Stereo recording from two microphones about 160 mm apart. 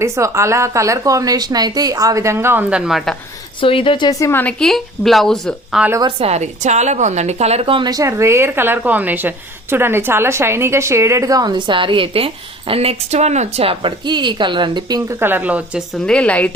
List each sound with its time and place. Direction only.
0.0 s a woman's voice: 20° right (ahead or behind); by 3.2 s 5° right (ahead or behind)
3.6 s a woman's voice: 35° left (ahead or behind); by 4.5 s 15° left (ahead or behind)
4.6 s speech: centre (ahead or behind)
6.0 s a woman's voice: 30° right (ahead or behind)
15.2 s speech: 10° right (ahead or behind)
16.0 s a woman's voice: 5° left (ahead or behind)